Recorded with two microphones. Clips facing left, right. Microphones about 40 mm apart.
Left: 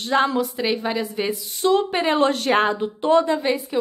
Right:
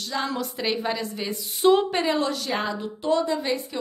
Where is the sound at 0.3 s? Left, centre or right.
Centre.